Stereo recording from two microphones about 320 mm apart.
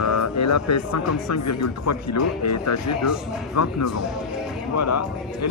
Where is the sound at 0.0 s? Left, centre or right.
Left.